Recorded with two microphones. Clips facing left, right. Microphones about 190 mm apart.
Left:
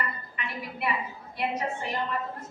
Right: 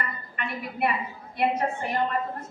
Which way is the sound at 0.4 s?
55° right (ahead or behind).